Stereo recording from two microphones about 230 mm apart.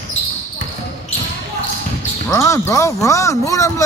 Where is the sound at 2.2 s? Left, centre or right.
Centre.